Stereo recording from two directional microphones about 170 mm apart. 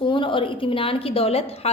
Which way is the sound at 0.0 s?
30° left (ahead or behind).